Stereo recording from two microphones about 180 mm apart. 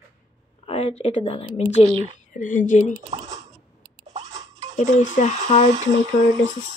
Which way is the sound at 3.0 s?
40° right (ahead or behind).